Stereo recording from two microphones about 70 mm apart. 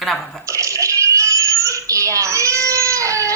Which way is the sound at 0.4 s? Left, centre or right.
Right.